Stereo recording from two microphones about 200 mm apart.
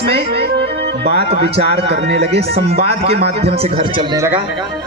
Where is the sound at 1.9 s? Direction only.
55° right (ahead or behind).